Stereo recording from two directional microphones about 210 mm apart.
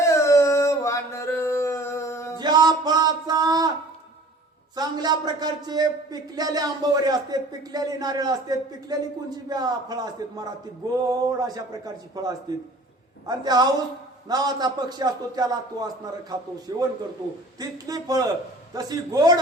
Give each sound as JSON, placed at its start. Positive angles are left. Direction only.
{"t": 0.0, "sound": "a sound", "side_deg": 15}
{"t": 2.4, "sound": "music", "side_deg": -20}
{"t": 4.7, "sound": "a man's voice", "side_deg": -20}